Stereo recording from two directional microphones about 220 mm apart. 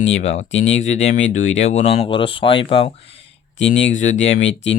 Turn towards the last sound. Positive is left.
turn(degrees=55)  # may be behind; listen again after turning